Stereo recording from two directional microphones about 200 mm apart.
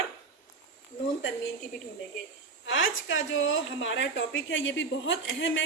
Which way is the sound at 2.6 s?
70° left (ahead or behind).